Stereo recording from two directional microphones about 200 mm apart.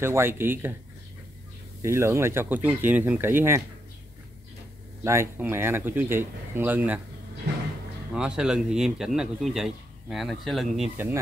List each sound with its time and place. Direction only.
0.0 s speech: 10° right (ahead or behind)
1.8 s speech: 15° right (ahead or behind)
5.0 s speech: 15° right (ahead or behind)
8.1 s speech: 5° right (ahead or behind)